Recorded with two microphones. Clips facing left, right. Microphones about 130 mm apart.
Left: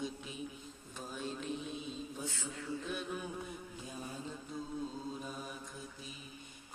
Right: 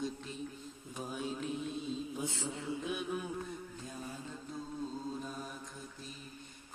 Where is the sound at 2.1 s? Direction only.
20° right (ahead or behind).